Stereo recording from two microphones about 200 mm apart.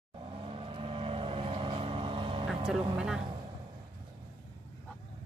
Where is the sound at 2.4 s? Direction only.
5° right (ahead or behind).